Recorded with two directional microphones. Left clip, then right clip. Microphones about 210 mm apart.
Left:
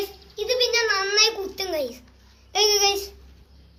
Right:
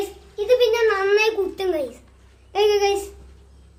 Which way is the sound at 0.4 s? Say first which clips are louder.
Right 5 dB; 10° right (ahead or behind).